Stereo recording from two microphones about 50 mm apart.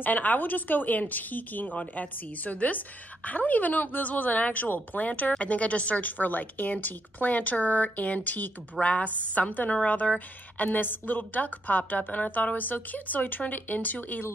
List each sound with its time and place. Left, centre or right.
0.0 s a woman's voice: left